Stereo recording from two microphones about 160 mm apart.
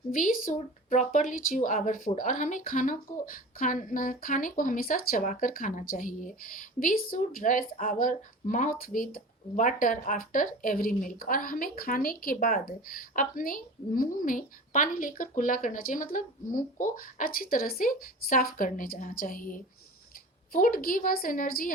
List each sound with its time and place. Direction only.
0.1 s speech: 60° left (ahead or behind)